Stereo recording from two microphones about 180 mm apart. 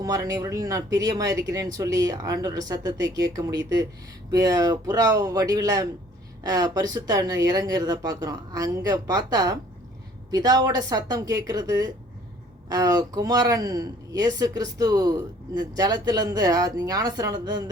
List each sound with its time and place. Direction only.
0.0 s speech: 20° right (ahead or behind)